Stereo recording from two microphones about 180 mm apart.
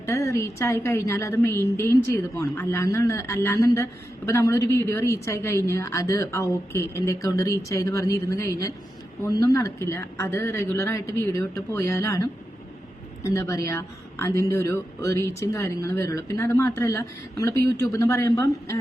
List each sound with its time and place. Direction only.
0.0 s a woman's voice: 15° left (ahead or behind)